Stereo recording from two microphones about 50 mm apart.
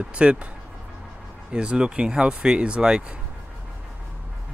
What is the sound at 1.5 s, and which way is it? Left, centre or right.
Speech, centre.